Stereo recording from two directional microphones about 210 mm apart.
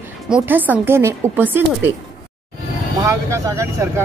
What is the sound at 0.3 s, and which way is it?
Speech, 10° right (ahead or behind).